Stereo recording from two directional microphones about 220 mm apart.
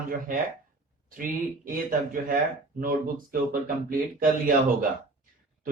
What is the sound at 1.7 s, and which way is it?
A man's voice, 40° right (ahead or behind).